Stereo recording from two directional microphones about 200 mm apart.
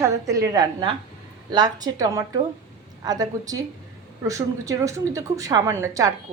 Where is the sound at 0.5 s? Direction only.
20° right (ahead or behind).